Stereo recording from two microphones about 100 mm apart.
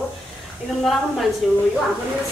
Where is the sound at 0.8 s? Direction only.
Centre (ahead or behind).